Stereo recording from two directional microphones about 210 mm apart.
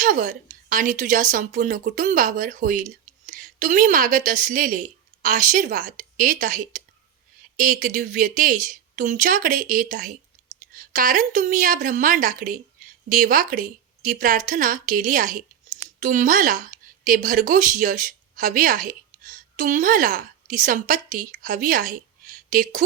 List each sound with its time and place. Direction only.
0.0 s a woman's voice: 40° right (ahead or behind)